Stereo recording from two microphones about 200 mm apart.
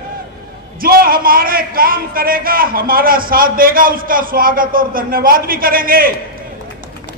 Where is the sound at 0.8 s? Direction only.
45° right (ahead or behind).